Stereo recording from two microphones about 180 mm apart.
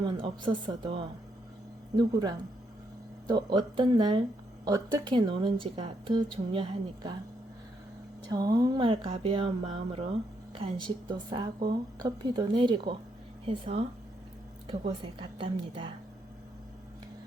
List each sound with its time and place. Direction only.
0.0 s speech: 25° right (ahead or behind)
8.3 s speech: 20° right (ahead or behind)